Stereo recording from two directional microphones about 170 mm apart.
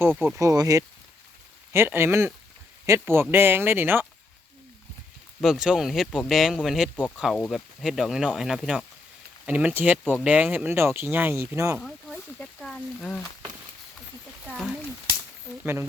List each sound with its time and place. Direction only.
0.2 s speech: 15° right (ahead or behind)
5.4 s speech: 5° right (ahead or behind)
11.8 s speech: 5° left (ahead or behind)
14.4 s speech: centre (ahead or behind)
15.6 s speech: 10° right (ahead or behind)